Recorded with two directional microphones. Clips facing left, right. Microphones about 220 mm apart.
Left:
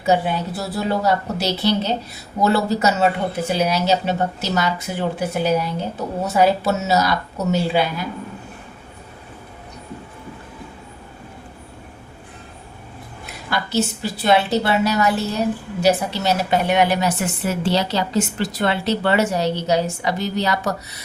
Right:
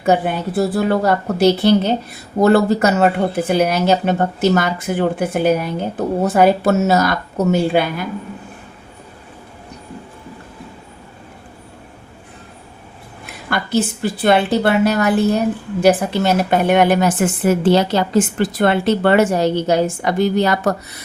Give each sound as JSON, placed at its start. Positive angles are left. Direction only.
{"t": 0.0, "sound": "a woman's voice", "side_deg": -55}
{"t": 13.5, "sound": "a woman's voice", "side_deg": -55}